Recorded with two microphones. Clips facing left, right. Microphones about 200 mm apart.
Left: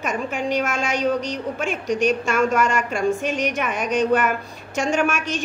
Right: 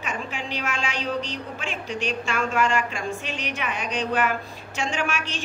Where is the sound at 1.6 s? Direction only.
45° left (ahead or behind).